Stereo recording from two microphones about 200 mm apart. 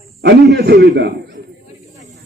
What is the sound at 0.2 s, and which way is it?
Speech, 55° right (ahead or behind).